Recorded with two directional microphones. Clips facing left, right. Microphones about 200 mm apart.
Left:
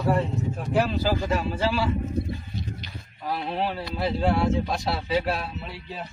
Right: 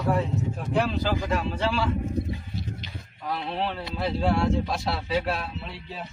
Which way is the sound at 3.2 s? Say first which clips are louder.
Left 2 dB; 5° left (ahead or behind).